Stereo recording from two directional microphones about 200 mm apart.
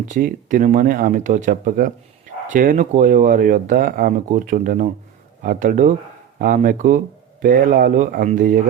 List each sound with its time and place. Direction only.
0.1 s speech: 40° right (ahead or behind)